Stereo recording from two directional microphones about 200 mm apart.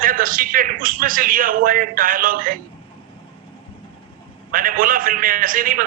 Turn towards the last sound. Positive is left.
turn(degrees=-45)  # may be behind; listen again after turning